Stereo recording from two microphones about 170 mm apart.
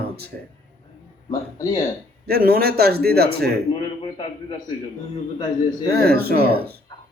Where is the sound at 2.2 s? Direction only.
65° right (ahead or behind).